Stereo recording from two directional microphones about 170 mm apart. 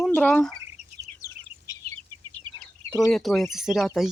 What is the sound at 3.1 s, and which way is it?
Speech, centre (ahead or behind).